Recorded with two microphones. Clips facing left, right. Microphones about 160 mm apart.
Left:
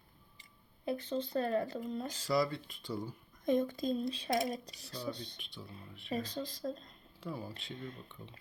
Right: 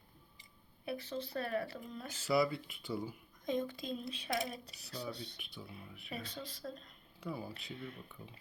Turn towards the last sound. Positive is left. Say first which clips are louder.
# left 2 dB
turn(degrees=35)  # may be behind; listen again after turning